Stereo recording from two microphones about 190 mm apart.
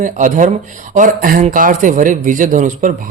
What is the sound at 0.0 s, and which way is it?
A man's voice, 40° right (ahead or behind).